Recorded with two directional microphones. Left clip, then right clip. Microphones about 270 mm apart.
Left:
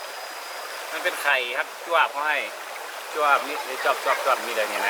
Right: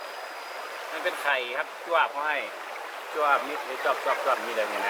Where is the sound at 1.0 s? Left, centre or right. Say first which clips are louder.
Left 4 dB; centre.